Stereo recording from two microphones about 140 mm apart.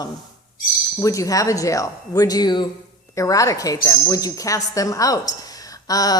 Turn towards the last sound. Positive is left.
turn(degrees=25)  # may be behind; listen again after turning